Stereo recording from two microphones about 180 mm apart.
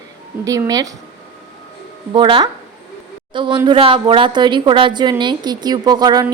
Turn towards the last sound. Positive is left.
turn(degrees=-20)  # may be behind; listen again after turning